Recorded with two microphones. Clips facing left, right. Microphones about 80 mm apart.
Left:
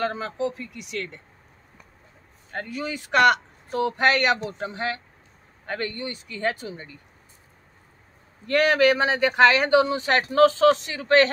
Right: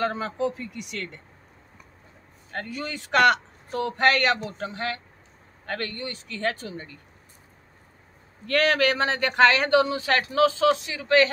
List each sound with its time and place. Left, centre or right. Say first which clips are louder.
0.0 s speech: even; centre
2.5 s speech: left 2 dB; centre
8.5 s speech: left 3 dB; centre
10.6 s a man's voice: left 3 dB; left